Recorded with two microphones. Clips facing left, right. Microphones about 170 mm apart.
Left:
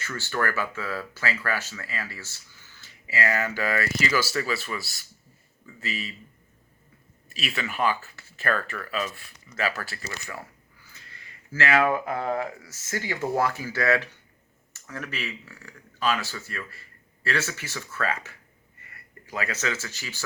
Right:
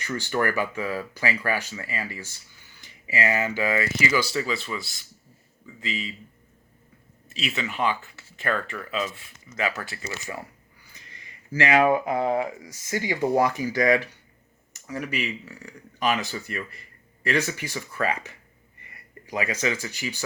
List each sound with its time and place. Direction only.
0.0 s speech: 15° right (ahead or behind)
7.3 s speech: 20° right (ahead or behind)